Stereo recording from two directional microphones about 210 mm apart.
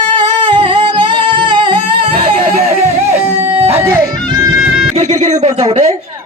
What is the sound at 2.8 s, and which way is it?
Music, 10° right (ahead or behind).